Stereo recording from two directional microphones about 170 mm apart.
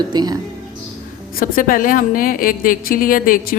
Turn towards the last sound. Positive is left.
turn(degrees=55)  # may be behind; listen again after turning